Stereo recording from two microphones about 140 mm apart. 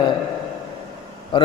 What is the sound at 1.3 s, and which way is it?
Speech, 35° left (ahead or behind).